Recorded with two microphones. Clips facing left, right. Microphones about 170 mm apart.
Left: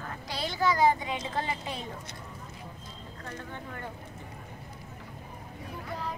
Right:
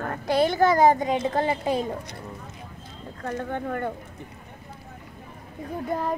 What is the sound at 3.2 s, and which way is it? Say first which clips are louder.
Speech: right 12 dB; 60° right (ahead or behind).